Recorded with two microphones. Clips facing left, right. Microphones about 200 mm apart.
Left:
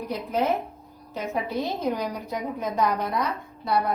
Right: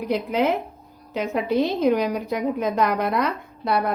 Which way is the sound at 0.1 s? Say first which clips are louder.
Right 4 dB; 75° right (ahead or behind).